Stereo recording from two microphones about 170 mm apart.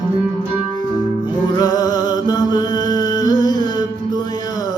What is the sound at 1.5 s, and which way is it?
Music, 25° left (ahead or behind).